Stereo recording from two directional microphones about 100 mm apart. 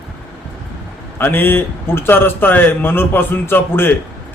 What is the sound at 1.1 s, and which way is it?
A man's voice, 20° left (ahead or behind).